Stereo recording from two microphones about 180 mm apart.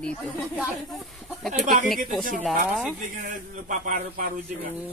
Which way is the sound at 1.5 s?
45° right (ahead or behind).